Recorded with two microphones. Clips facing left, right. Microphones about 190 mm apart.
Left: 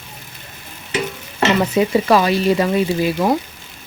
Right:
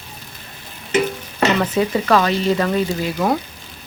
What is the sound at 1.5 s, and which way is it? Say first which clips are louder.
Speech: left 3 dB; 10° left (ahead or behind).